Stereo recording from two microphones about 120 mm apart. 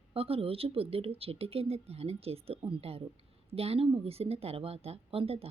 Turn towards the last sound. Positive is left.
turn(degrees=-55)  # may be behind; listen again after turning